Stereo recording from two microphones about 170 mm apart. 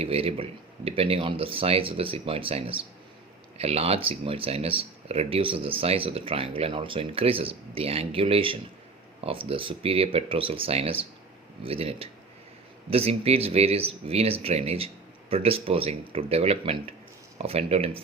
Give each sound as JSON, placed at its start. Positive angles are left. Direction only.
{"t": 0.0, "sound": "speech", "side_deg": -35}